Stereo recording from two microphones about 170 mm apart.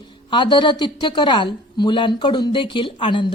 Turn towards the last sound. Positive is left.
turn(degrees=30)  # may be behind; listen again after turning